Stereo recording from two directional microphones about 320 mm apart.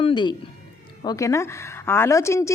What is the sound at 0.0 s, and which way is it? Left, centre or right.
A woman's voice, centre.